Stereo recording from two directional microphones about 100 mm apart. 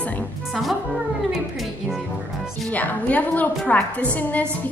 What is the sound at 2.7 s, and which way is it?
A woman's voice, 15° left (ahead or behind).